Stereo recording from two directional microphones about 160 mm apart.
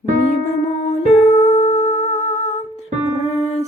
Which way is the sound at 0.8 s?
45° left (ahead or behind).